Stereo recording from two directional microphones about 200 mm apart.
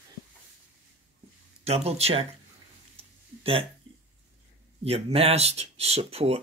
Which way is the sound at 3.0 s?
30° right (ahead or behind).